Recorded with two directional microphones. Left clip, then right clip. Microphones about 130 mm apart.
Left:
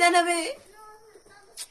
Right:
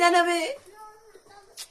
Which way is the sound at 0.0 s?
20° left (ahead or behind).